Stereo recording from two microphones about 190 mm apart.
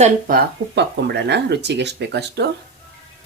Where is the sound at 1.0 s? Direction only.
60° right (ahead or behind).